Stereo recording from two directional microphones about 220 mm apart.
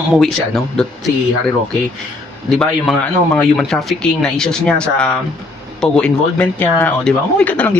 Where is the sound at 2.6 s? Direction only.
5° left (ahead or behind).